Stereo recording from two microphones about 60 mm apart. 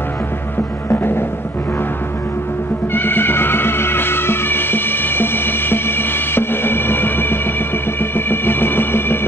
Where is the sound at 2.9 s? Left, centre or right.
Left.